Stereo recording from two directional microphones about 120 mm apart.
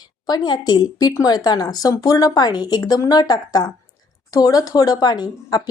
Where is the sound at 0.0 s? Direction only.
35° left (ahead or behind).